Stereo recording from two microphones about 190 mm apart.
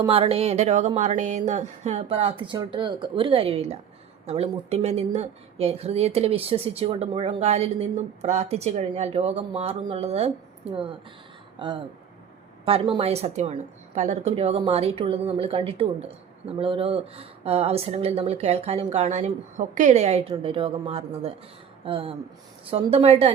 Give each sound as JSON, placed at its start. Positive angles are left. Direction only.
{"t": 0.1, "sound": "a woman's voice", "side_deg": -30}